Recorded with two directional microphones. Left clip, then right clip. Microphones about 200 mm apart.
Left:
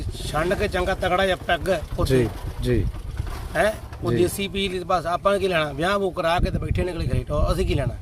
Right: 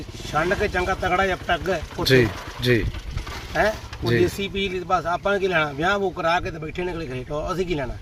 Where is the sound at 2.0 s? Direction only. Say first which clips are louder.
Right 4 dB; 5° right (ahead or behind).